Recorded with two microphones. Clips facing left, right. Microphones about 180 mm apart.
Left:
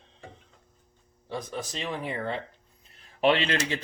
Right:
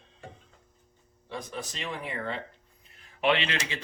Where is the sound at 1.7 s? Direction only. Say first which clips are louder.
Left 4 dB; 35° left (ahead or behind).